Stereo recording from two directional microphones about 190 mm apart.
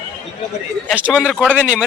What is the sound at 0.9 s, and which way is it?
Speech, 5° right (ahead or behind).